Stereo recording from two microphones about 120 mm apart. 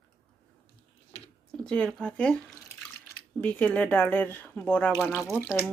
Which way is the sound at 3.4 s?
10° left (ahead or behind).